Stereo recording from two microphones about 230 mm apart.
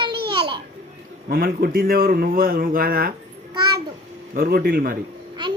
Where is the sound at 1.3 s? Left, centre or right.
Right.